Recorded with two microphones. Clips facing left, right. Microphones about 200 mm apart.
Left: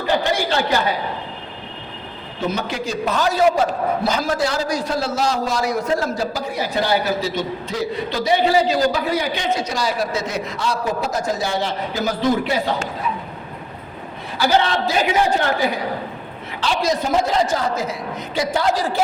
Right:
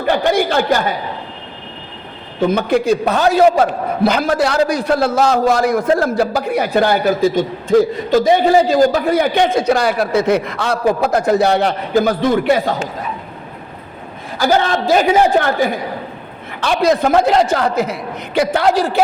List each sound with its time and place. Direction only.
0.0 s a sound: 55° right (ahead or behind)
2.5 s a man's voice: 55° right (ahead or behind)
14.3 s a man's voice: 50° right (ahead or behind)